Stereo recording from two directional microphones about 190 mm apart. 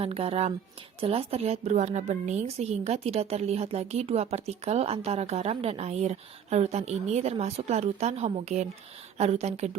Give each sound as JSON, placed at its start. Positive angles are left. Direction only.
{"t": 0.0, "sound": "speech", "side_deg": -30}